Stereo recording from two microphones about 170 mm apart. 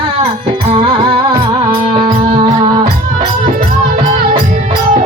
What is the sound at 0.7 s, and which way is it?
Music, 35° right (ahead or behind).